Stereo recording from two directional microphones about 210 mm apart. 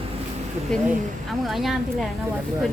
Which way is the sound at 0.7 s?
5° left (ahead or behind).